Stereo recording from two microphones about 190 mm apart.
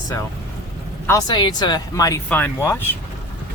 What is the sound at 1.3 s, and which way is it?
Speech, 25° left (ahead or behind).